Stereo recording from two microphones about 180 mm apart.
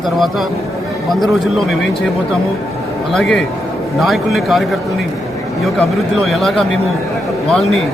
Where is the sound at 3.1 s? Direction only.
5° left (ahead or behind).